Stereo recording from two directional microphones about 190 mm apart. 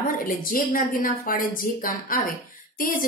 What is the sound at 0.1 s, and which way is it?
A woman's voice, 45° left (ahead or behind).